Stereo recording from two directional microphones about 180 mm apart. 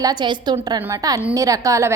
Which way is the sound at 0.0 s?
25° right (ahead or behind).